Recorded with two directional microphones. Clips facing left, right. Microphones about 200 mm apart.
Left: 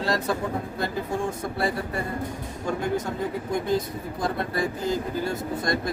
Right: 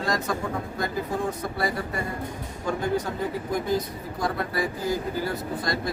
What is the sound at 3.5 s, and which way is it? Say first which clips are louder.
Speech: left 2 dB; 25° left (ahead or behind).